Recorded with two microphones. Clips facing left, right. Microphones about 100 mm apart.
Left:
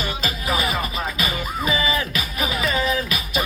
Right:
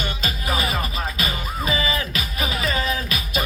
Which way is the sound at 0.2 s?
35° right (ahead or behind).